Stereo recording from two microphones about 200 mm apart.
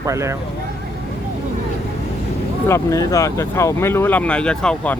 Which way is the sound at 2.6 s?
15° left (ahead or behind).